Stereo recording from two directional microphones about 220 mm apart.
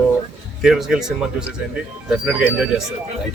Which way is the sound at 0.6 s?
Centre (ahead or behind).